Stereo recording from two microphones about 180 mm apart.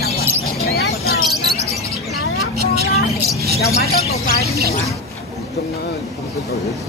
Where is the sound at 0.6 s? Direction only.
60° left (ahead or behind).